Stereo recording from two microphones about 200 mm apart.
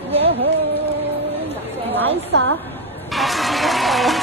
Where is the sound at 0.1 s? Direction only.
30° right (ahead or behind).